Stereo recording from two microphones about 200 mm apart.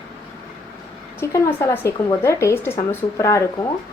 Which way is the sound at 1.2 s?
15° left (ahead or behind).